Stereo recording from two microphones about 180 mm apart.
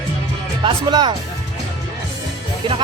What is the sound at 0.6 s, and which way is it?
Speech, 25° right (ahead or behind).